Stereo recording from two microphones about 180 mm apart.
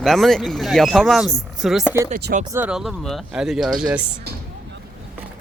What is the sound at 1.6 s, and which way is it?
Speech, centre (ahead or behind).